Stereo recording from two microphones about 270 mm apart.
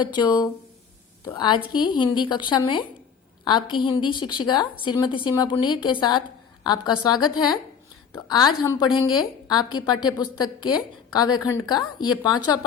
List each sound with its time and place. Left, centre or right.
0.0 s a woman's voice: centre